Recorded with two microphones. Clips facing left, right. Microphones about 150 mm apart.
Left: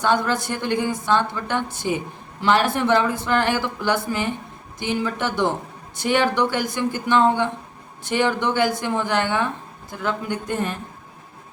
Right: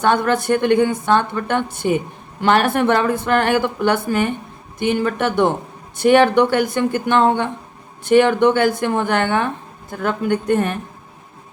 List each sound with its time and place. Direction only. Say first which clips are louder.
0.0 s a woman's voice: right 4 dB; 60° right (ahead or behind)